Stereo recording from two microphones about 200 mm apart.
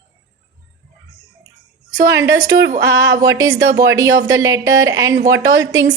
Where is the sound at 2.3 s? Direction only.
15° right (ahead or behind).